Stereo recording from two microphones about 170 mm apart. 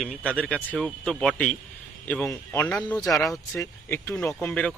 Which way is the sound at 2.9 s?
20° left (ahead or behind).